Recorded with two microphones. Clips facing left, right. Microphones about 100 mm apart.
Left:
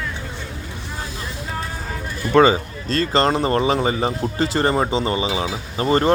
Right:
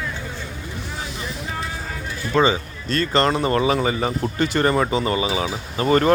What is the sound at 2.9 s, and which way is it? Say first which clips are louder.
Speech: left 1 dB; 35° left (ahead or behind).